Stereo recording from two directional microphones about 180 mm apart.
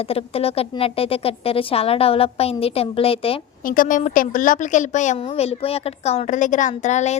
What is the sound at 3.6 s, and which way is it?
A woman's voice, 50° left (ahead or behind).